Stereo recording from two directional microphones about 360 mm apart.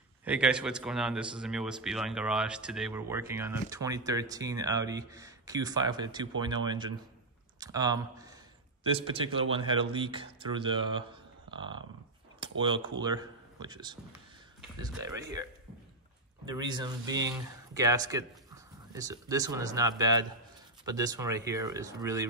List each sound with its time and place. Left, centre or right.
0.2 s a man's voice: centre
9.5 s a man's voice: centre
16.4 s speech: centre